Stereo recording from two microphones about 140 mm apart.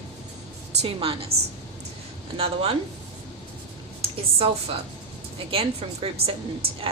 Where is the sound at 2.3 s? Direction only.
45° right (ahead or behind).